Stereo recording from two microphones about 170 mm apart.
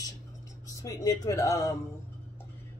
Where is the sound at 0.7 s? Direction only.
20° left (ahead or behind).